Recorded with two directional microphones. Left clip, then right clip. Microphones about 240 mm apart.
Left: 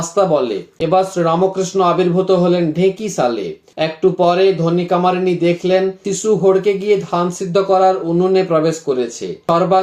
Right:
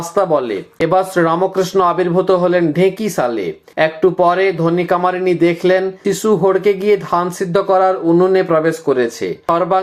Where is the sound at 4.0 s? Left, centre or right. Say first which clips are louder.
Left 2 dB; right.